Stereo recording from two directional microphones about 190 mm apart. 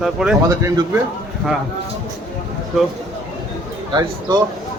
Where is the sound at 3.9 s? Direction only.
20° right (ahead or behind).